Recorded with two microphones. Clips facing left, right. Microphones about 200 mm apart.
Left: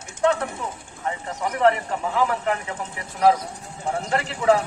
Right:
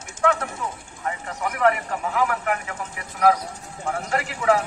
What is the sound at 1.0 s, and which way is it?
A man's voice, 30° left (ahead or behind).